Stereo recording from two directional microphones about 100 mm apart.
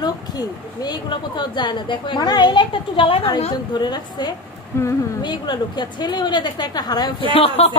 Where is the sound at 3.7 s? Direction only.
45° left (ahead or behind).